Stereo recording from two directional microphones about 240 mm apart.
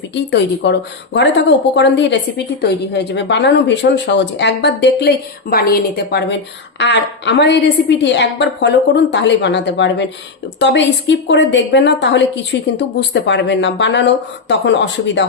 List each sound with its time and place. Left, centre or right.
0.1 s speech: left